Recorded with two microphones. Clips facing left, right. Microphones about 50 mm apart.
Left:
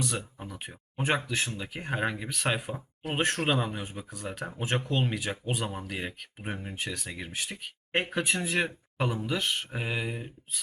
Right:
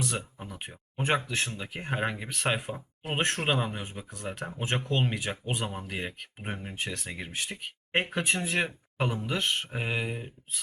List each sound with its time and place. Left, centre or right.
0.0 s speech: centre
4.4 s speech: centre